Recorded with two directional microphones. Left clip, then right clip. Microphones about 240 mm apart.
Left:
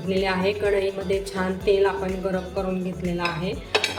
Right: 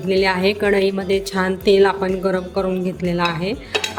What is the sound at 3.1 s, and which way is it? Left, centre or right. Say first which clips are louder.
Speech: right 6 dB; right.